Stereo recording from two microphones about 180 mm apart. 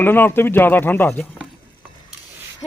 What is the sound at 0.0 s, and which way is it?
Speech, 10° left (ahead or behind).